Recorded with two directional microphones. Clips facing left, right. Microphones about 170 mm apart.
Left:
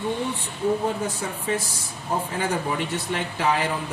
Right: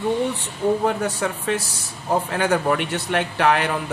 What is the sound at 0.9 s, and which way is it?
Speech, 75° right (ahead or behind).